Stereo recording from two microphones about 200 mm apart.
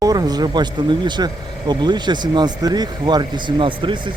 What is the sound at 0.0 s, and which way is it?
Speech, 20° right (ahead or behind).